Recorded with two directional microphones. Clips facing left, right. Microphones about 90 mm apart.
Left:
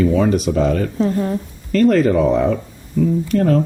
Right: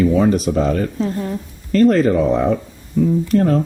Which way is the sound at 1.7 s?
35° right (ahead or behind).